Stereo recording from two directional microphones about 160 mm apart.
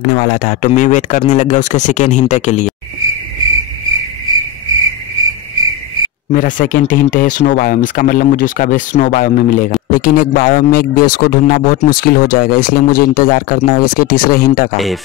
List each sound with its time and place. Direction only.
0.0 s speech: 50° left (ahead or behind)
6.3 s speech: 60° left (ahead or behind)